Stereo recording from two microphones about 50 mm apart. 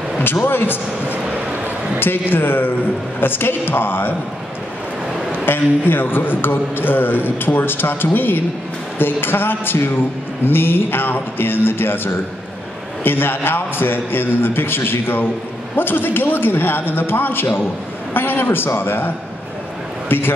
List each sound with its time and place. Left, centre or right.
0.2 s a man's voice: left
2.0 s a man's voice: left
5.4 s a man's voice: left